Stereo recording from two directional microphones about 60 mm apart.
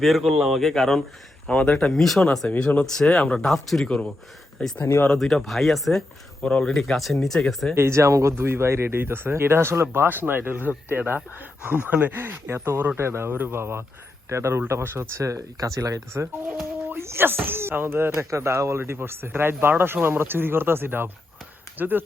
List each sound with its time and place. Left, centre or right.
0.0 s speech: centre
1.5 s speech: left
2.0 s speech: centre
2.6 s speech: centre
2.8 s speech: centre
3.8 s speech: centre
5.0 s speech: centre
6.4 s speech: centre
7.8 s speech: right
8.4 s speech: right
17.0 s wail: right
17.2 s speech: right
18.3 s speech: right